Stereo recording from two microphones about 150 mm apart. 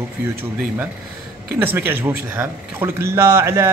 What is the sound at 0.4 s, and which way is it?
Speech, 10° right (ahead or behind).